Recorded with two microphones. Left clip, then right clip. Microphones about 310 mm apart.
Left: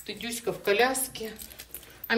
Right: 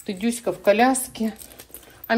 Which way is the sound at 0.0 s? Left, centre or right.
Centre.